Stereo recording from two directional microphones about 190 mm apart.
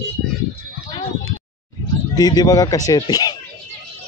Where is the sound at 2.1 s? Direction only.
20° left (ahead or behind).